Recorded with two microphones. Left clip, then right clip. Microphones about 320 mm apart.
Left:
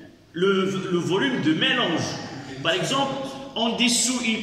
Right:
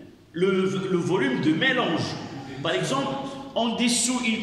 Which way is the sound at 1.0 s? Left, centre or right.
Centre.